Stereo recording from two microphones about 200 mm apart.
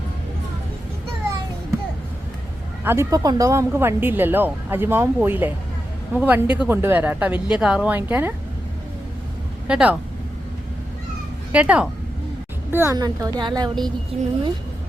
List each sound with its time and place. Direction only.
2.8 s speech: 15° right (ahead or behind)
9.6 s speech: 5° right (ahead or behind)
11.5 s a woman's voice: 5° right (ahead or behind)